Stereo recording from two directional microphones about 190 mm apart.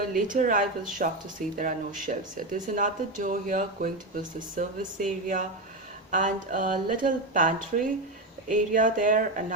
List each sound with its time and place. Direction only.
0.1 s speech: 45° right (ahead or behind)